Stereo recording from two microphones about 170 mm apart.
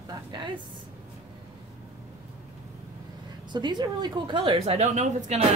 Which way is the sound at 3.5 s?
25° right (ahead or behind).